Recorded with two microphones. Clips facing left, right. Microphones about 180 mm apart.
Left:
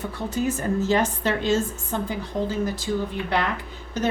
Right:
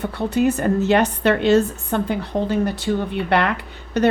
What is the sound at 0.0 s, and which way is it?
A woman's voice, 65° right (ahead or behind).